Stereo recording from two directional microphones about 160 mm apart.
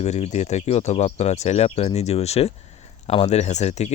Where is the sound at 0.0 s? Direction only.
45° left (ahead or behind).